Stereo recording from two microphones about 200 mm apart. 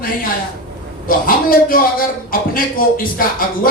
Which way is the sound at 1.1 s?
45° left (ahead or behind).